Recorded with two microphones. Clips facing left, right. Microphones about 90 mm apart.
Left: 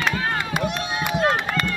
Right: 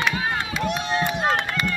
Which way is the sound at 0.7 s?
10° left (ahead or behind).